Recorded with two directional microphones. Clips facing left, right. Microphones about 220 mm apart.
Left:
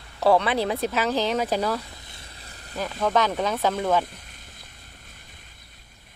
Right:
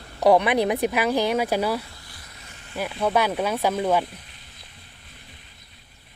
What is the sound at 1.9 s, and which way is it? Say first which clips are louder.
Vehicle: left 1 dB; 25° left (ahead or behind).